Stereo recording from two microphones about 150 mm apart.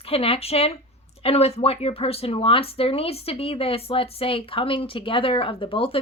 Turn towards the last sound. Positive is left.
turn(degrees=35)  # may be behind; listen again after turning